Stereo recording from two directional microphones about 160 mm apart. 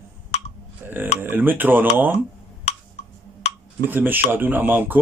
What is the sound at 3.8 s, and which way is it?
Speech, 10° right (ahead or behind).